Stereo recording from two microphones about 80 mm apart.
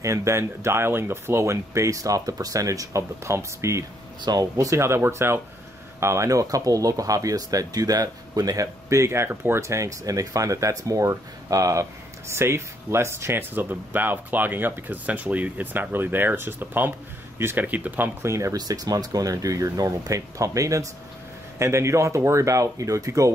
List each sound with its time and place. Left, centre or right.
0.0 s speech: right
4.2 s speech: right
4.6 s speech: right
8.8 s speech: right
18.2 s speech: right